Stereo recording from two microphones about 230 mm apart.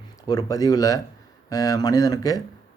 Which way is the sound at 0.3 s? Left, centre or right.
Centre.